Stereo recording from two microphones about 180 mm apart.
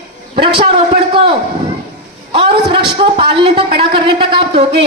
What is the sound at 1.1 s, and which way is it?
A woman's voice, 30° right (ahead or behind).